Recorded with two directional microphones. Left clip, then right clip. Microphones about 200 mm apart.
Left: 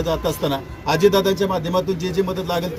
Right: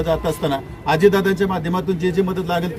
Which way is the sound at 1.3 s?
30° right (ahead or behind).